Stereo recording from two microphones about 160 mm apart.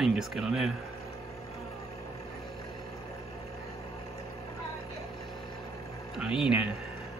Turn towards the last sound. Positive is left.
turn(degrees=-5)  # may be behind; listen again after turning